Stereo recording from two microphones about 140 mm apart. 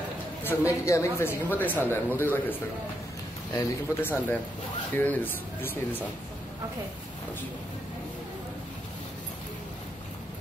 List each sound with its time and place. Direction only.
0.4 s speech: 20° left (ahead or behind)
3.5 s speech: 15° left (ahead or behind)